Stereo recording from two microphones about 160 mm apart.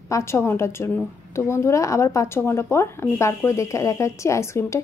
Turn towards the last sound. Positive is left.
turn(degrees=15)  # may be behind; listen again after turning